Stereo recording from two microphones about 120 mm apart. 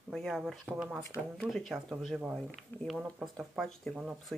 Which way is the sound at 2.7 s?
15° left (ahead or behind).